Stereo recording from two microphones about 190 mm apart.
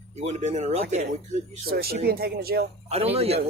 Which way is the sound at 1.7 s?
55° right (ahead or behind).